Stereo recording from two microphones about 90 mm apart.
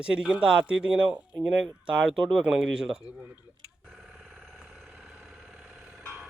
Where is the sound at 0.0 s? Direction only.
10° right (ahead or behind).